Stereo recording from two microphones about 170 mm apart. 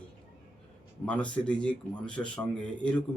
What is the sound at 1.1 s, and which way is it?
Speech, 10° left (ahead or behind).